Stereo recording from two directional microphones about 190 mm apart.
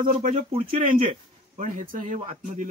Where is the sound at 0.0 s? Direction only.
45° right (ahead or behind).